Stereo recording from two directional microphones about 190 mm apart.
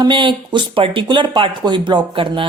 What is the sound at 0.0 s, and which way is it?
Speech, 25° right (ahead or behind).